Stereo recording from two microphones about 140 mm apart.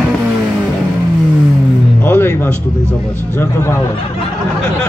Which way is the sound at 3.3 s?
20° left (ahead or behind).